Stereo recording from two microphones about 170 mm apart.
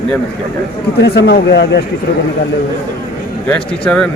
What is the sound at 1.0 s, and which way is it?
Speech, 85° left.